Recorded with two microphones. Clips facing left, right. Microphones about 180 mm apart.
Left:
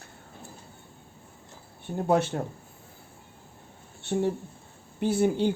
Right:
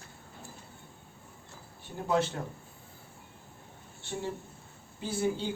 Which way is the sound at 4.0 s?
60° left (ahead or behind).